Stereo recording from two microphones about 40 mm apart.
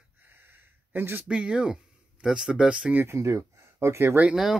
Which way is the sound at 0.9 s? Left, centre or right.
Right.